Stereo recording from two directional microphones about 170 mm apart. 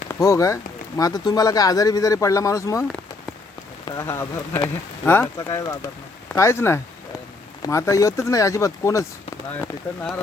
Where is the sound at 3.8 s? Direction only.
20° left (ahead or behind).